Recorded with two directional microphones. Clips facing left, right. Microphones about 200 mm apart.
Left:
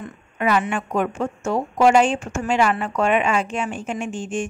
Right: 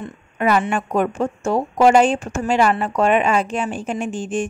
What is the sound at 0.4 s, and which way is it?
A woman's voice, 40° right (ahead or behind).